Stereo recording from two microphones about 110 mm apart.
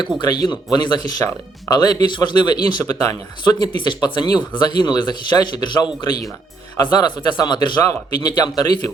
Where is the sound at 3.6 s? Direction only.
45° left (ahead or behind).